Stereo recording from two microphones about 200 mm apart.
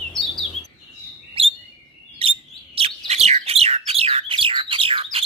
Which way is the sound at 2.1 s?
30° right (ahead or behind).